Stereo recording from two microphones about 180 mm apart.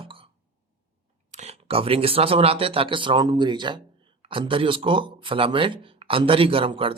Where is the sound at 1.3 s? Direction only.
35° right (ahead or behind).